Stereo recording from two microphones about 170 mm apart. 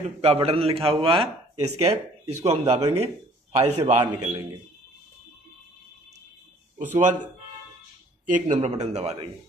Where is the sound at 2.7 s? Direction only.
20° right (ahead or behind).